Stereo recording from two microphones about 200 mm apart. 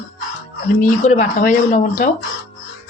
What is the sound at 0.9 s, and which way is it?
Speech, 35° left (ahead or behind).